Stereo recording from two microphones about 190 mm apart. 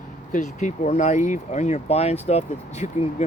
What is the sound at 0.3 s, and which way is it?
Speech, 40° left (ahead or behind).